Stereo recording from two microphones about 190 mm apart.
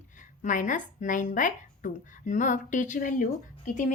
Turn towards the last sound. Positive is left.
turn(degrees=40)  # may be behind; listen again after turning